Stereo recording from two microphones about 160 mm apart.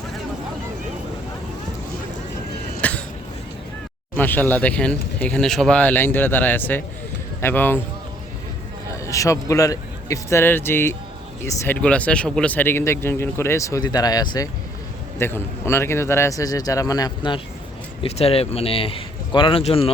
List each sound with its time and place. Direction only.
2.8 s a sound: 10° left (ahead or behind)
4.1 s speech: 10° left (ahead or behind)
9.0 s speech: 20° left (ahead or behind)
18.0 s speech: 40° left (ahead or behind)